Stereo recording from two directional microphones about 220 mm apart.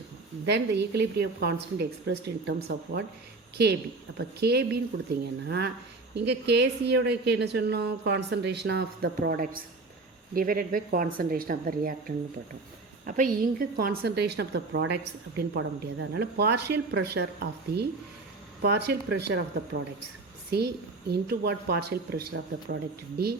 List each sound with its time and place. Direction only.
0.4 s a woman's voice: 50° right (ahead or behind)
4.2 s a woman's voice: 50° right (ahead or behind)
20.5 s a woman's voice: 45° right (ahead or behind)